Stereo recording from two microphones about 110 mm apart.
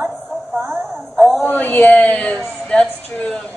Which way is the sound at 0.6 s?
20° right (ahead or behind).